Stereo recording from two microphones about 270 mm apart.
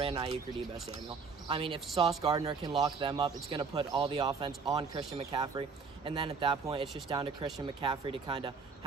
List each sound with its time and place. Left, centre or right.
0.0 s speech: right